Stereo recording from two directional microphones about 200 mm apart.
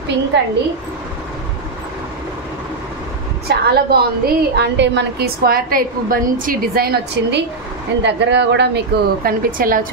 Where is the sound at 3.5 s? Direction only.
55° right (ahead or behind).